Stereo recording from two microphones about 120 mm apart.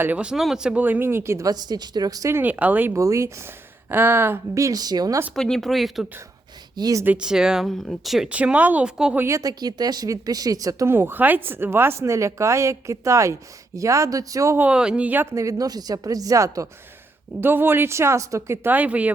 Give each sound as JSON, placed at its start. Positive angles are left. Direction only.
{"t": 0.0, "sound": "speech", "side_deg": -10}
{"t": 2.4, "sound": "speech", "side_deg": -15}
{"t": 5.3, "sound": "speech", "side_deg": 5}
{"t": 6.7, "sound": "speech", "side_deg": -30}
{"t": 7.0, "sound": "speech", "side_deg": -10}
{"t": 9.2, "sound": "speech", "side_deg": -30}
{"t": 14.6, "sound": "speech", "side_deg": -10}